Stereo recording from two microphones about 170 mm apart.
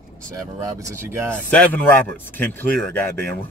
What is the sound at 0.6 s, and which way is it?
Speech, 20° right (ahead or behind).